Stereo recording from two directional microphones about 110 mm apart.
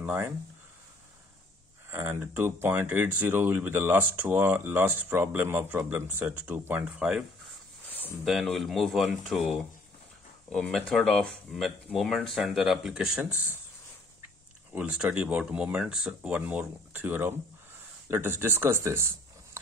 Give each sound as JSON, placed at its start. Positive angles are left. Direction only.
{"t": 0.0, "sound": "speech", "side_deg": -20}
{"t": 1.9, "sound": "speech", "side_deg": -20}
{"t": 8.3, "sound": "speech", "side_deg": 0}
{"t": 10.5, "sound": "speech", "side_deg": 10}
{"t": 14.7, "sound": "speech", "side_deg": -10}